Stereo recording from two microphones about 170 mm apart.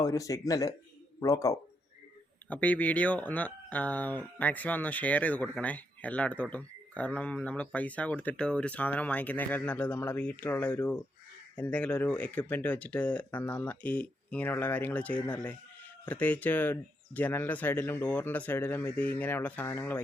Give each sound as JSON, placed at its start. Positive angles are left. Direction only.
{"t": 0.0, "sound": "speech", "side_deg": 20}
{"t": 2.5, "sound": "speech", "side_deg": 10}